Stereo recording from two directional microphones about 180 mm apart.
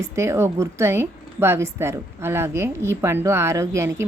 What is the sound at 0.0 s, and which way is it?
A woman's voice, 15° right (ahead or behind).